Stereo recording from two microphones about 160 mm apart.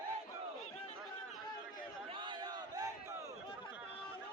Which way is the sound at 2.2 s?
30° right (ahead or behind).